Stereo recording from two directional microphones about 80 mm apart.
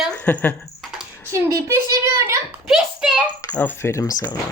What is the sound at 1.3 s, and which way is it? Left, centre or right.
A child's voice, right.